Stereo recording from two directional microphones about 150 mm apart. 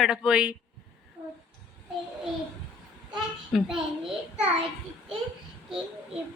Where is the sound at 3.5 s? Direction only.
Centre (ahead or behind).